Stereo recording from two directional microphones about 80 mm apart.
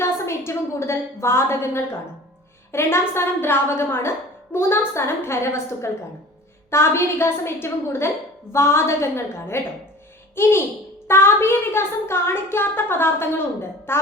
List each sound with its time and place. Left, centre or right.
0.0 s a woman's voice: left